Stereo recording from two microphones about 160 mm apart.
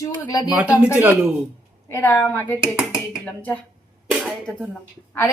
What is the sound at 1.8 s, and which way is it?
A woman's voice, 15° left (ahead or behind).